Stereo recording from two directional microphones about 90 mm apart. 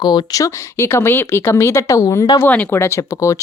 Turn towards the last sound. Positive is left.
turn(degrees=30)  # may be behind; listen again after turning